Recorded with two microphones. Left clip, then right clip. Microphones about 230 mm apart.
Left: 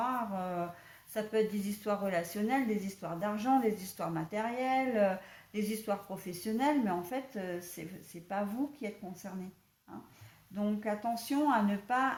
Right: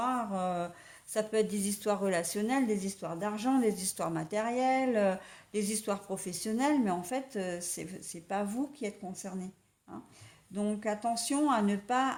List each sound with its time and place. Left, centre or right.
0.0 s a sound: right
1.1 s a woman's voice: right
10.5 s a woman's voice: right